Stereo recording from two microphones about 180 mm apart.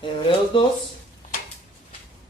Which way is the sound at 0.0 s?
30° left (ahead or behind).